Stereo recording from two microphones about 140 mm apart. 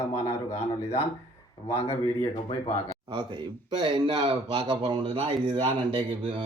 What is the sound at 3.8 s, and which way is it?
Speech, 35° right (ahead or behind).